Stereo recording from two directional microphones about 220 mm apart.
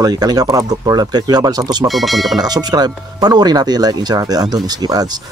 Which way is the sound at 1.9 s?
Centre (ahead or behind).